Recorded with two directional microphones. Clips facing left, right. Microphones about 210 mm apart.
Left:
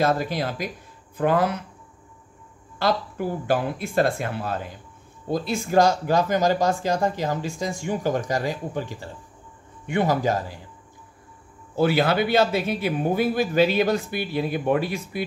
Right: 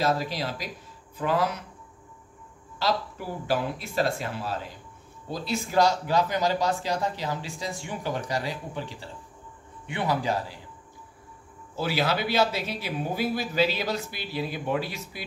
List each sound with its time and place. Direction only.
0.0 s speech: 55° left (ahead or behind)
2.8 s speech: 55° left (ahead or behind)
11.7 s speech: 55° left (ahead or behind)